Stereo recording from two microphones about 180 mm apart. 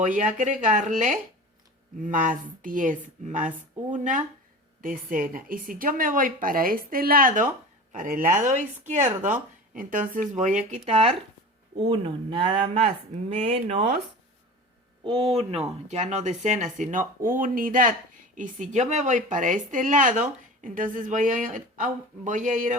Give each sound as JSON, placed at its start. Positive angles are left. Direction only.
{"t": 0.0, "sound": "speech", "side_deg": -45}
{"t": 15.0, "sound": "speech", "side_deg": -30}